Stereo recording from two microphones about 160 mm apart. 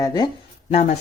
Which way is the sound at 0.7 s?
40° left (ahead or behind).